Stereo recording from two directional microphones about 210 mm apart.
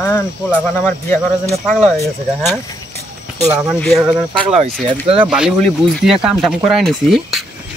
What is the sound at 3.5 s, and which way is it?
Speech, centre (ahead or behind).